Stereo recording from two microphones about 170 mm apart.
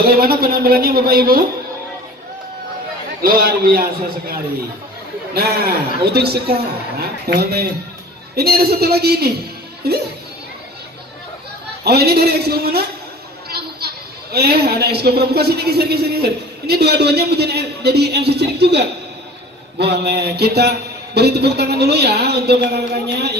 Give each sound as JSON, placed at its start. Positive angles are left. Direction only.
{"t": 0.2, "sound": "a man's voice", "side_deg": -60}
{"t": 3.2, "sound": "a man's voice", "side_deg": -60}
{"t": 11.8, "sound": "a child's voice", "side_deg": -70}